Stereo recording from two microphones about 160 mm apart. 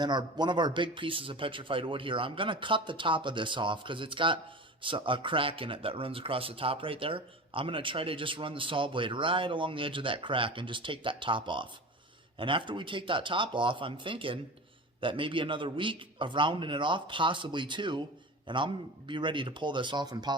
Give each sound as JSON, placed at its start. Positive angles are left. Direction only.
{"t": 0.0, "sound": "speech", "side_deg": -25}